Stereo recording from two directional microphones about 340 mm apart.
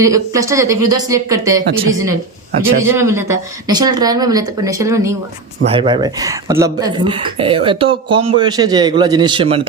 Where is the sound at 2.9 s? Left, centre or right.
Centre.